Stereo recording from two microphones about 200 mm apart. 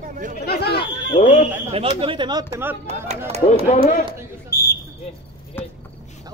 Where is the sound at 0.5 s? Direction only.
55° left (ahead or behind).